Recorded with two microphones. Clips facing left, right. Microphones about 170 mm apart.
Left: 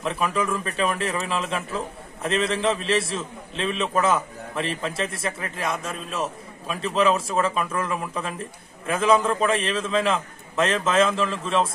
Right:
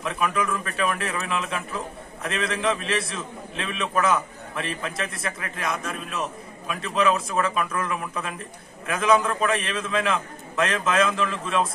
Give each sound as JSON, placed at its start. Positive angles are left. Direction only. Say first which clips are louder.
{"t": 0.0, "sound": "a man's voice", "louder": "left 1 dB", "side_deg": 30}